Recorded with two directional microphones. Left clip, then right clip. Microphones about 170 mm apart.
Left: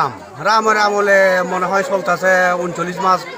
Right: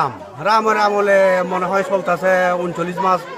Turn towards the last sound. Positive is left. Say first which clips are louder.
# left 2 dB
turn(degrees=-15)  # may be behind; listen again after turning